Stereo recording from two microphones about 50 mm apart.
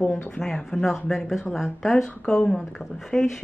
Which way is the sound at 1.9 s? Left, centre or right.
Centre.